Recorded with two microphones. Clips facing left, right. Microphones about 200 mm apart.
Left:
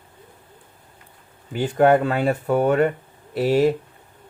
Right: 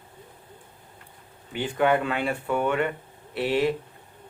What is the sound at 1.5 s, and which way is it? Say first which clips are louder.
Speech: left 6 dB; 40° left (ahead or behind).